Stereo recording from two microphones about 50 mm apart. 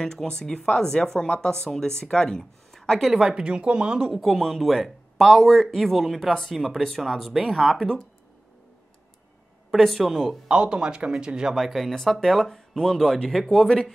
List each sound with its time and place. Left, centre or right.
0.0 s speech: centre
3.1 s speech: centre
4.1 s speech: centre
9.7 s speech: centre
10.5 s speech: centre
11.5 s speech: centre